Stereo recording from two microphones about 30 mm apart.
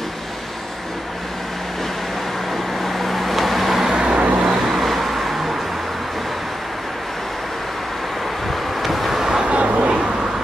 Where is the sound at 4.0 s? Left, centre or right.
Right.